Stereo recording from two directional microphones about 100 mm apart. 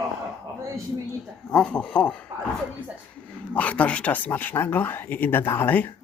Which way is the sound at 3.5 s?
15° left (ahead or behind).